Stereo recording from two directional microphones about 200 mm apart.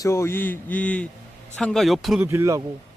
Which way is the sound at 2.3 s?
15° right (ahead or behind).